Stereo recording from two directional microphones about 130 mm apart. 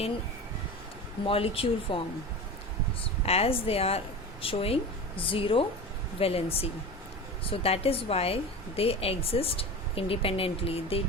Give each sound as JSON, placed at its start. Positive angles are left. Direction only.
{"t": 1.3, "sound": "a woman's voice", "side_deg": 45}
{"t": 3.2, "sound": "a woman's voice", "side_deg": 50}